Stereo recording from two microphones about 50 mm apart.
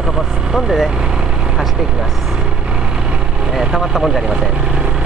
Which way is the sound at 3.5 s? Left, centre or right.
Centre.